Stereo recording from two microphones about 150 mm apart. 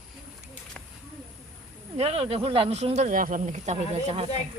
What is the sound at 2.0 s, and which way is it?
Speech, 40° right (ahead or behind).